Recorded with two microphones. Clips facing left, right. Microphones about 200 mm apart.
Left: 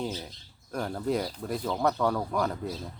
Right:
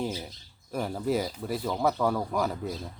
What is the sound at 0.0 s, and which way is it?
Speech, 10° right (ahead or behind).